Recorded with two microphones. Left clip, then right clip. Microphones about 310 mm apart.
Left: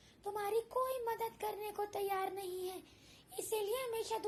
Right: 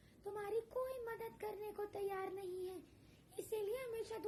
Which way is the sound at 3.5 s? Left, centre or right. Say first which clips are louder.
Left 5 dB; centre.